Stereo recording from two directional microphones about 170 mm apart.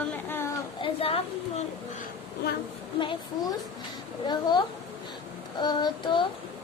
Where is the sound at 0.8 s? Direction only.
35° left (ahead or behind).